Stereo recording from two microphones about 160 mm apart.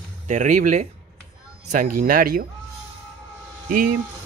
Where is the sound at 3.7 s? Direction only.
65° right (ahead or behind).